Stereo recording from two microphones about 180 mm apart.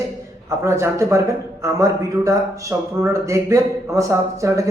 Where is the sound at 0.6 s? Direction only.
15° right (ahead or behind).